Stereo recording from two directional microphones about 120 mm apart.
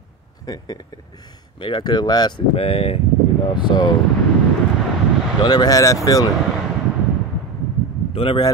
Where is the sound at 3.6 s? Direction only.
35° left (ahead or behind).